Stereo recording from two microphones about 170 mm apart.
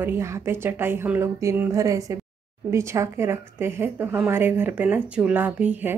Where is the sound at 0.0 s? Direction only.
15° right (ahead or behind).